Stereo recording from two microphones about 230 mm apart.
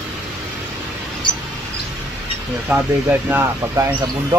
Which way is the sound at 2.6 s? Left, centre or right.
Centre.